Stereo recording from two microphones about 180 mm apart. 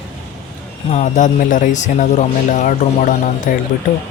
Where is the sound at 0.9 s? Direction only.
40° left (ahead or behind).